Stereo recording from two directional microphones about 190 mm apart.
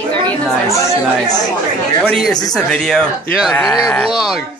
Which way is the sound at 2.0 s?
Centre (ahead or behind).